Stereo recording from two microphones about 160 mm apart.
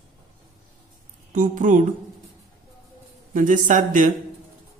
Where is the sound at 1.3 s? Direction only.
55° right (ahead or behind).